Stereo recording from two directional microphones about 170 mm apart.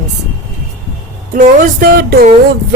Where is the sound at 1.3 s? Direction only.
60° right (ahead or behind).